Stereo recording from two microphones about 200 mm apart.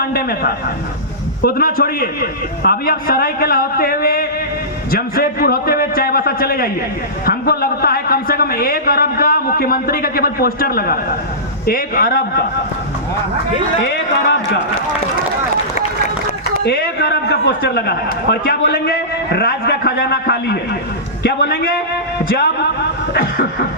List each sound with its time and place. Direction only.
0.0 s a man's voice: 50° left (ahead or behind)
16.6 s a man's voice: 55° left (ahead or behind)
23.1 s a man's voice: 50° left (ahead or behind)